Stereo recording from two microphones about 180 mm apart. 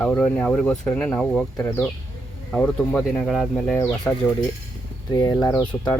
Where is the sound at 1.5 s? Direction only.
15° left (ahead or behind); by 3.7 s centre (ahead or behind).